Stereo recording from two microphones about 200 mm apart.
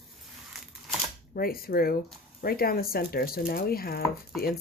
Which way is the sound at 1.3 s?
50° left (ahead or behind).